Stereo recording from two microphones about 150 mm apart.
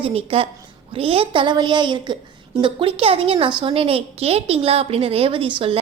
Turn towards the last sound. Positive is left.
turn(degrees=-40)  # may be behind; listen again after turning